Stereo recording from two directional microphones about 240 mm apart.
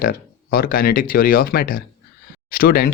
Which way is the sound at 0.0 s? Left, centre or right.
Left.